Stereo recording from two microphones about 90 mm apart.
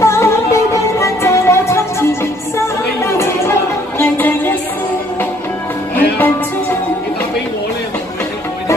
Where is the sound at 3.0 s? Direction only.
30° left (ahead or behind).